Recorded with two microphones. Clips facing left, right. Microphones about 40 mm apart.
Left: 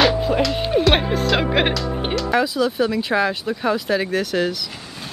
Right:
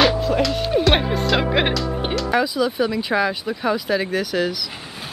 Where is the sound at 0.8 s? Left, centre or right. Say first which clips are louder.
Left 1 dB; centre.